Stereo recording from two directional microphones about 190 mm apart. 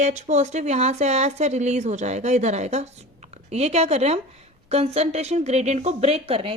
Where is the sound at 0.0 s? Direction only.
40° right (ahead or behind).